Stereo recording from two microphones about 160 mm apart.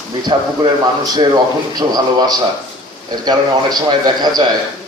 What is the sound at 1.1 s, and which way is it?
A man's voice, 25° right (ahead or behind).